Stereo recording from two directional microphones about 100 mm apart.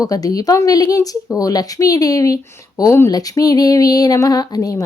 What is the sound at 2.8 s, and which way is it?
Speech, 25° left (ahead or behind).